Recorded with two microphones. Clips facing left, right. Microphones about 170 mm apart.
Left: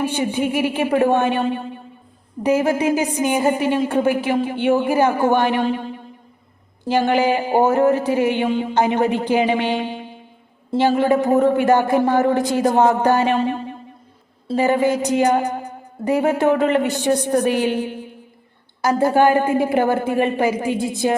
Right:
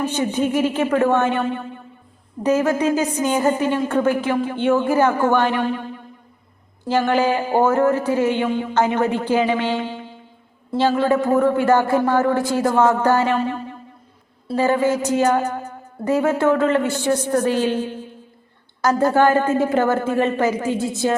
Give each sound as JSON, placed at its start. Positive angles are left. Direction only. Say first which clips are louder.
{"t": 0.0, "sound": "a woman's voice", "louder": "even", "side_deg": 10}
{"t": 1.5, "sound": "a sound", "louder": "left 2 dB", "side_deg": 15}
{"t": 2.4, "sound": "a woman's voice", "louder": "even", "side_deg": 10}